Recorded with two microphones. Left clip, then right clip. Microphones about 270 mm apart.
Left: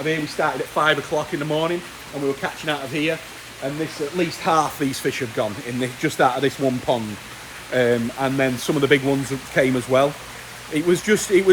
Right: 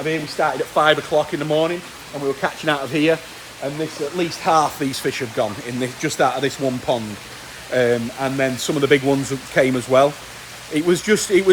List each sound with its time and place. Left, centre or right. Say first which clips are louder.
0.0 s speech: right 1 dB; centre
2.4 s speech: right 4 dB; right
4.2 s speech: right 2 dB; centre